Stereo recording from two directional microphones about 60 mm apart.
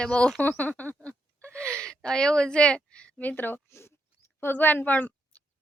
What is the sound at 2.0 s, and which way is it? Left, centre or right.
A woman's voice, centre.